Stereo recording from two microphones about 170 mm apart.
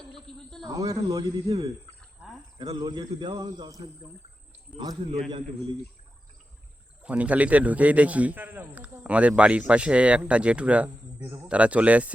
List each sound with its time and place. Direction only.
0.6 s speech: 20° right (ahead or behind)
7.0 s a man's voice: 10° right (ahead or behind)